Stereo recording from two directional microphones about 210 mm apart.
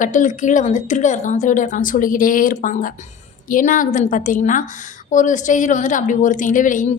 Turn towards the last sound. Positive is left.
turn(degrees=40)  # may be behind; listen again after turning